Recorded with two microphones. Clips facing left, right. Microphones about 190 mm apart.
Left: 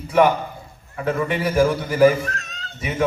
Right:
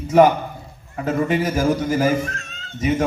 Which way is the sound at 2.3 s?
40° left (ahead or behind).